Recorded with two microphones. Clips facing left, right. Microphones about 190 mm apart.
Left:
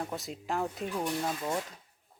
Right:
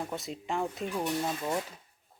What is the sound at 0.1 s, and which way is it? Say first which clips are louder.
Speech: even; centre (ahead or behind).